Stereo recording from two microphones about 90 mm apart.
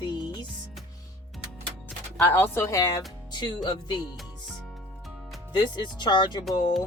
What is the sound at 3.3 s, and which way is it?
Speech, 50° left (ahead or behind).